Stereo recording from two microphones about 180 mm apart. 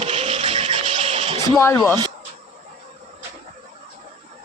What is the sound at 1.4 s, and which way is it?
Speech, 20° left (ahead or behind).